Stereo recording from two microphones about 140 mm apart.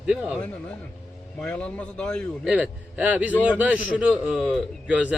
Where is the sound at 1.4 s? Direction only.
5° left (ahead or behind).